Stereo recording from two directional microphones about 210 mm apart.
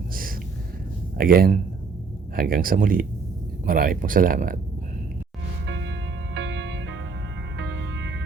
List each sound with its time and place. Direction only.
0.1 s a sound: 45° right (ahead or behind)
1.2 s speech: 45° right (ahead or behind)
5.6 s music: 60° right (ahead or behind)